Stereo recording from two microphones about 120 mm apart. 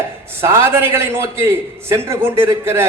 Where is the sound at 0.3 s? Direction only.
20° right (ahead or behind).